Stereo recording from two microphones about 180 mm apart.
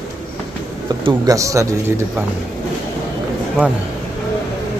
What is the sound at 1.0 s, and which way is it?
A man's voice, 20° right (ahead or behind).